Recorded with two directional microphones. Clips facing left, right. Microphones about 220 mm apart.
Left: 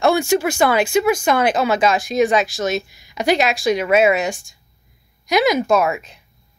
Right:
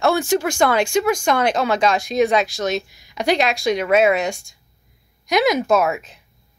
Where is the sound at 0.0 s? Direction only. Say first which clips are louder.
Left 2 dB; 10° left (ahead or behind).